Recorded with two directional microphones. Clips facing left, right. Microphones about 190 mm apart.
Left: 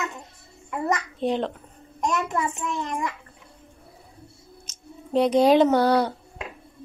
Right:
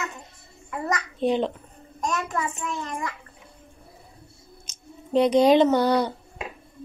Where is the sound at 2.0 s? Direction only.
20° left (ahead or behind).